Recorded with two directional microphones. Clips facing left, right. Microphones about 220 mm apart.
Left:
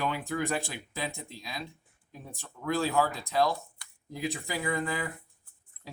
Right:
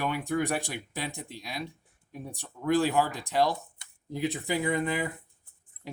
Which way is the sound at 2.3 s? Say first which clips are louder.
Right 5 dB; 15° right (ahead or behind).